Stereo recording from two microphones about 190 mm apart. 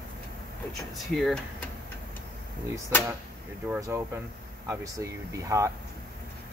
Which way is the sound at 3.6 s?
10° right (ahead or behind).